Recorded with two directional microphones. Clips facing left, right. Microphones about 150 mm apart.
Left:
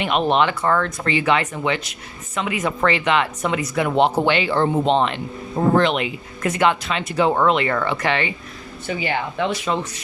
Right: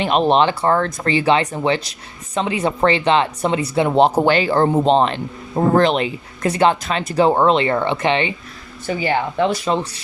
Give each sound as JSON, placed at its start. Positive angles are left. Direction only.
{"t": 0.0, "sound": "speech", "side_deg": -35}
{"t": 8.9, "sound": "speech", "side_deg": -40}